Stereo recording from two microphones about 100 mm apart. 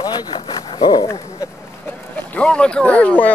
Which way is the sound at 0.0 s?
45° left (ahead or behind).